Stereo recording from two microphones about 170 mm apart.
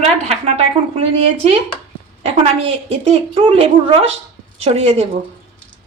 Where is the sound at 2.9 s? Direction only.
35° right (ahead or behind).